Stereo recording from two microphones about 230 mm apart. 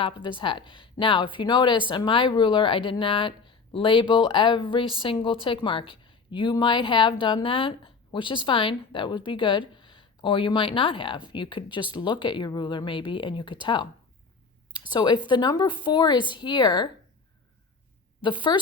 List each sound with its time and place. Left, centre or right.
0.0 s speech: left
18.2 s a woman's voice: left